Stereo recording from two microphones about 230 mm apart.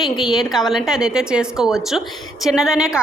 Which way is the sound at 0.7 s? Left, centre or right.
Centre.